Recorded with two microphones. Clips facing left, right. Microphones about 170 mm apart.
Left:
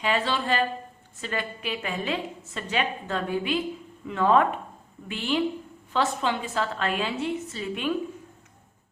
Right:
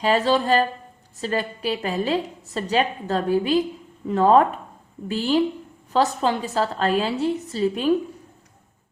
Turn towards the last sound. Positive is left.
turn(degrees=-35)  # may be behind; listen again after turning